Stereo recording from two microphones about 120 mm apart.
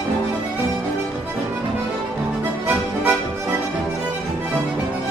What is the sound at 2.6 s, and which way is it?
Music, 15° right (ahead or behind).